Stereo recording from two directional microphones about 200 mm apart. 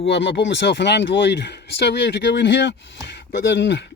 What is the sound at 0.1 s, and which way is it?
Speech, 60° left (ahead or behind).